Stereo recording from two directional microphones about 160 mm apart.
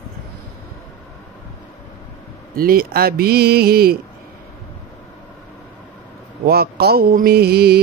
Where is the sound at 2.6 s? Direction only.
70° right (ahead or behind).